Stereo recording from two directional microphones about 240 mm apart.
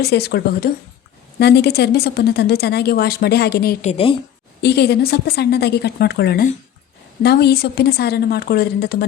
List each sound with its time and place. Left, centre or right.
0.0 s a woman's voice: left
3.8 s a woman's voice: left
4.6 s a woman's voice: left